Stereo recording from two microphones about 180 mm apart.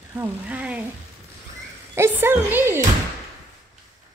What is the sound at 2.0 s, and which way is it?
Speech, 10° right (ahead or behind).